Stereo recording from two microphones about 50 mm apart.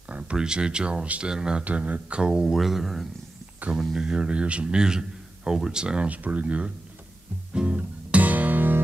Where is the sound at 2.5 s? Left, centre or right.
Centre.